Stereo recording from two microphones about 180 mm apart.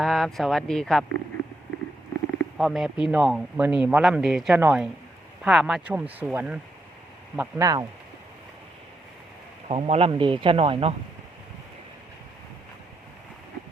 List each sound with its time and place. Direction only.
0.0 s a man's voice: centre (ahead or behind)
2.6 s a man's voice: centre (ahead or behind)
7.3 s speech: 20° right (ahead or behind)
9.6 s speech: 35° right (ahead or behind)